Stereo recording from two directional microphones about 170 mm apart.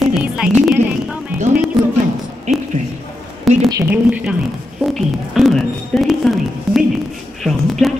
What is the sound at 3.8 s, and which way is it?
Speech, 10° right (ahead or behind).